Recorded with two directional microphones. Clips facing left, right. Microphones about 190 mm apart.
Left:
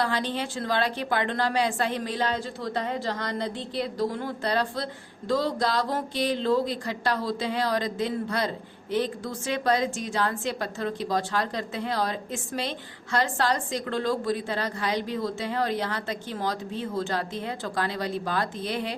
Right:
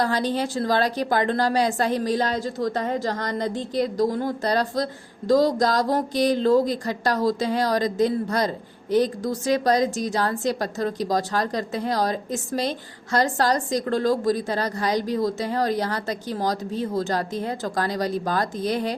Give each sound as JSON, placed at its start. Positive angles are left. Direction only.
{"t": 0.0, "sound": "speech", "side_deg": -40}